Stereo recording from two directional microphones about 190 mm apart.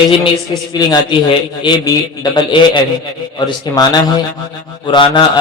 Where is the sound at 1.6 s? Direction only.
20° left (ahead or behind).